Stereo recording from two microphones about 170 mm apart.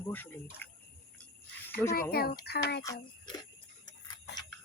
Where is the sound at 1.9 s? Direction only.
65° left (ahead or behind).